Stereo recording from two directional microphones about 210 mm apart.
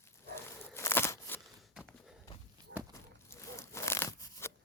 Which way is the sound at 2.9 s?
15° left (ahead or behind).